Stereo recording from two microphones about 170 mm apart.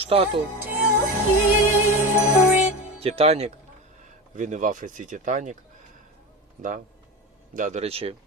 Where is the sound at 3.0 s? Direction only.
35° right (ahead or behind).